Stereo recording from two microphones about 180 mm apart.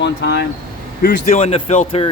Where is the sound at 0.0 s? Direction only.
70° left (ahead or behind).